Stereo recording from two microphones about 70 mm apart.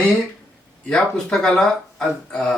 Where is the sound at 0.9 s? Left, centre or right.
Centre.